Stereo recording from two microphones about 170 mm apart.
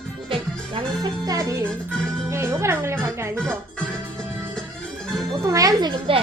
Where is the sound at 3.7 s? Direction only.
5° left (ahead or behind).